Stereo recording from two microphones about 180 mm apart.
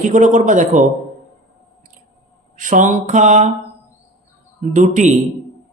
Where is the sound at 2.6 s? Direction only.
45° right (ahead or behind).